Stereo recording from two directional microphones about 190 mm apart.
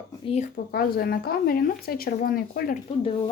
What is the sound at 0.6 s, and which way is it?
Speech, 50° left (ahead or behind).